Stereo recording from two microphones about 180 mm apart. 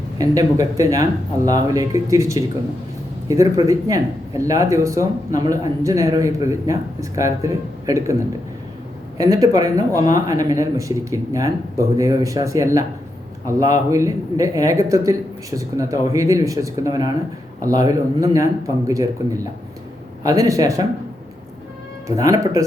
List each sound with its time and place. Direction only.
0.2 s speech: 20° right (ahead or behind)
9.1 s speech: 20° right (ahead or behind)
20.2 s speech: 20° right (ahead or behind)
22.0 s speech: 20° right (ahead or behind)